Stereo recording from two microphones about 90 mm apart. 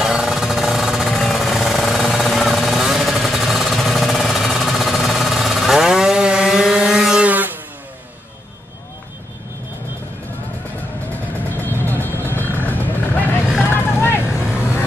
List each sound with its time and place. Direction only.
0.0 s jackhammer: 5° right (ahead or behind)
11.6 s vehicle: 20° left (ahead or behind)